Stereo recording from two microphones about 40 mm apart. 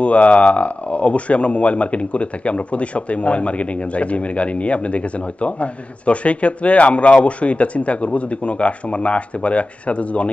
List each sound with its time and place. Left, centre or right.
0.0 s speech: left